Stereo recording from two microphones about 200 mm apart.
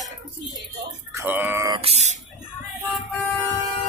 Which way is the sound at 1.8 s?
30° right (ahead or behind).